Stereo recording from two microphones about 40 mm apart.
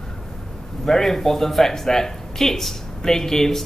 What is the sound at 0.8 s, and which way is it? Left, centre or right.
Speech, centre.